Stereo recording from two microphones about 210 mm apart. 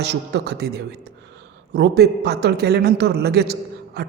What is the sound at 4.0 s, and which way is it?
Beatboxing, 50° right (ahead or behind).